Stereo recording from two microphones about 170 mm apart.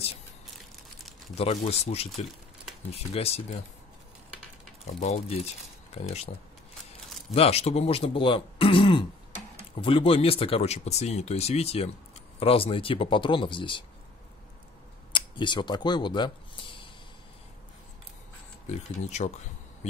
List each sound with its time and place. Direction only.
0.6 s crushing: centre (ahead or behind)
1.3 s speech: 35° left (ahead or behind)
5.0 s speech: 40° left (ahead or behind)
7.3 s speech: 35° left (ahead or behind)
15.1 s speech: 30° left (ahead or behind)
18.7 s speech: 40° left (ahead or behind)